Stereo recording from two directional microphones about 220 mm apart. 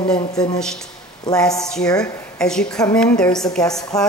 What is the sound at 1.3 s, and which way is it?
A woman's voice, 5° left (ahead or behind).